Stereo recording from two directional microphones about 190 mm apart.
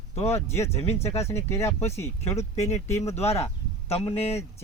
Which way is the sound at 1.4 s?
15° left (ahead or behind).